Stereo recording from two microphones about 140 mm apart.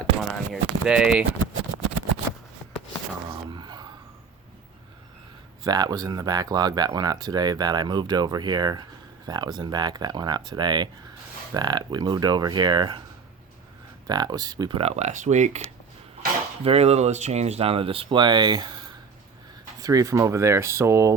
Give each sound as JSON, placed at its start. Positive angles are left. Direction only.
{"t": 0.2, "sound": "a sound", "side_deg": -5}
{"t": 3.5, "sound": "a sound", "side_deg": -30}
{"t": 5.6, "sound": "speech", "side_deg": -30}
{"t": 14.1, "sound": "speech", "side_deg": -30}
{"t": 14.8, "sound": "speech", "side_deg": -50}
{"t": 16.6, "sound": "speech", "side_deg": -45}
{"t": 19.8, "sound": "speech", "side_deg": -25}